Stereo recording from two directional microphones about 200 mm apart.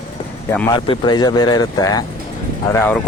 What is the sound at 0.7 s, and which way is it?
Speech, 20° left (ahead or behind).